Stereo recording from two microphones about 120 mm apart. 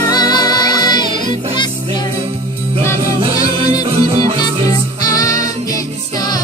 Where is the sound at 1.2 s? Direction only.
40° left (ahead or behind).